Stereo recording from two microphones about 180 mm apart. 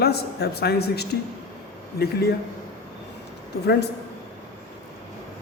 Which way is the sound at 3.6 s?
65° left (ahead or behind).